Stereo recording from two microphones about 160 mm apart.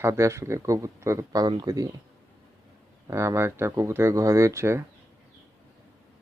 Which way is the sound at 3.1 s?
15° right (ahead or behind).